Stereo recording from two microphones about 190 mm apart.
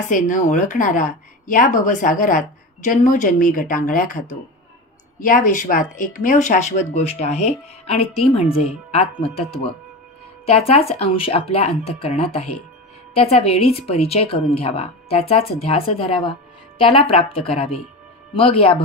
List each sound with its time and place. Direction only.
0.1 s a woman's voice: 40° left (ahead or behind)